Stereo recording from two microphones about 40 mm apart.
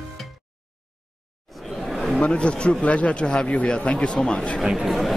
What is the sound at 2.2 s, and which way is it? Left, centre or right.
Speech, left.